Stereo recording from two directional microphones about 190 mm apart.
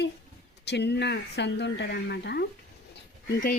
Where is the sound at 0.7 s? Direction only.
60° left (ahead or behind).